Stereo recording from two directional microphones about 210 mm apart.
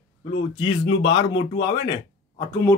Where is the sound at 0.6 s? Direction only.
30° left (ahead or behind).